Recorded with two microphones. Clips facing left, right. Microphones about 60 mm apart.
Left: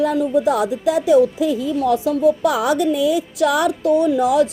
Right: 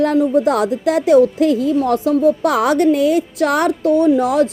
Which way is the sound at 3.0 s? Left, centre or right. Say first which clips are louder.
Right 2 dB; right.